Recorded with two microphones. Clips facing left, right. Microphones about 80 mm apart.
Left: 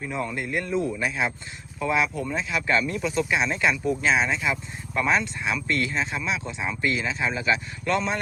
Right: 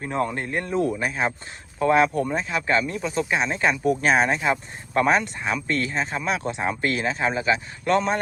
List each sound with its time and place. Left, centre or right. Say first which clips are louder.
0.0 s speech: right 4 dB; right
1.8 s a man's voice: right 6 dB; right
2.3 s speech: right 2 dB; right
3.8 s a man's voice: right 6 dB; right
6.3 s a man's voice: right 4 dB; right